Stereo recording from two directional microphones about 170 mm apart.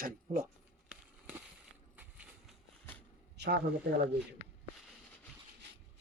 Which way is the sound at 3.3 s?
75° right (ahead or behind).